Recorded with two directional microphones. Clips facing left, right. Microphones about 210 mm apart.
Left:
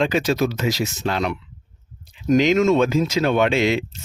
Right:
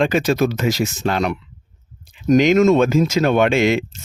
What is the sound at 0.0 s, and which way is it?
Speech, 50° right (ahead or behind).